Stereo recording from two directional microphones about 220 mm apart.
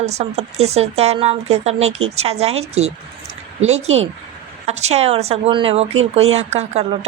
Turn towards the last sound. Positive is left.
turn(degrees=-30)  # may be behind; listen again after turning